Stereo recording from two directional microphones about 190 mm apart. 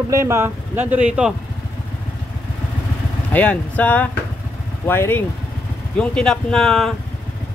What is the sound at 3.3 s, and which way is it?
Speech, 10° left (ahead or behind).